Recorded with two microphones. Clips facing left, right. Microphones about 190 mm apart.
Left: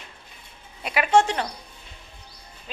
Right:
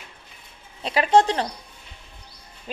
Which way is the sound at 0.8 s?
30° right (ahead or behind).